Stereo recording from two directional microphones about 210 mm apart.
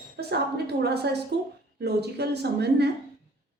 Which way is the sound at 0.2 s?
50° right (ahead or behind).